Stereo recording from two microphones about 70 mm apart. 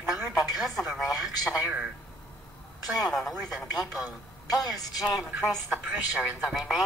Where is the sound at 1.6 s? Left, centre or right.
Right.